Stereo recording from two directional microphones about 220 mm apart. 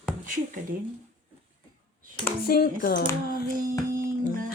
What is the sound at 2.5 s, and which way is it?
Speech, 40° left (ahead or behind).